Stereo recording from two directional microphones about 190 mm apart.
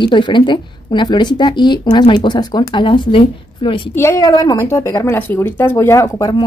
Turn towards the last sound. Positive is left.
turn(degrees=20)  # may be behind; listen again after turning